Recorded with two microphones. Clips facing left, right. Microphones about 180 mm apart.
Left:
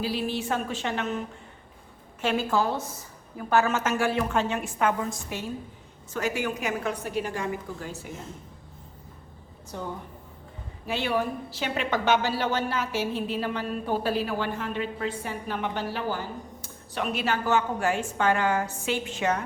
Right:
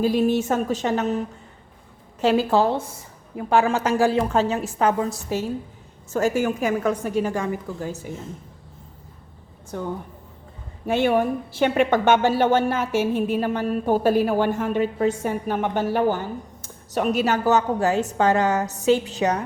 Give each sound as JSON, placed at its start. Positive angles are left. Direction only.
{"t": 0.0, "sound": "a woman's voice", "side_deg": -45}
{"t": 2.2, "sound": "a woman's voice", "side_deg": -35}
{"t": 3.3, "sound": "a woman's voice", "side_deg": -20}
{"t": 3.7, "sound": "a woman's voice", "side_deg": -35}
{"t": 10.8, "sound": "a woman's voice", "side_deg": -50}
{"t": 16.9, "sound": "a woman's voice", "side_deg": -40}